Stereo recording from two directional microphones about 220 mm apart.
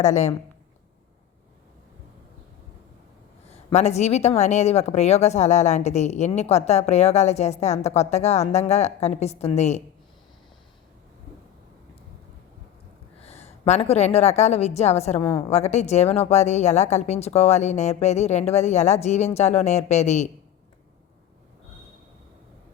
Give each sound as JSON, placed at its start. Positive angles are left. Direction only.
{"t": 0.0, "sound": "speech", "side_deg": 30}
{"t": 3.5, "sound": "speech", "side_deg": 30}
{"t": 13.2, "sound": "a woman's voice", "side_deg": 30}